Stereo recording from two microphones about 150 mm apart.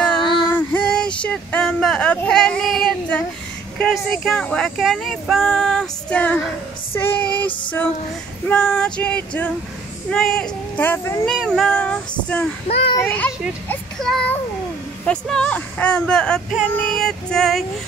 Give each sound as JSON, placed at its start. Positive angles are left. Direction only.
{"t": 0.4, "sound": "a sound", "side_deg": 5}
{"t": 3.7, "sound": "speech", "side_deg": 5}
{"t": 8.5, "sound": "female singing", "side_deg": 5}
{"t": 10.1, "sound": "speech", "side_deg": 5}
{"t": 10.8, "sound": "female singing", "side_deg": 15}
{"t": 11.2, "sound": "speech", "side_deg": 5}
{"t": 12.6, "sound": "a child's voice", "side_deg": 45}
{"t": 13.0, "sound": "female singing", "side_deg": 10}
{"t": 13.7, "sound": "speech", "side_deg": 5}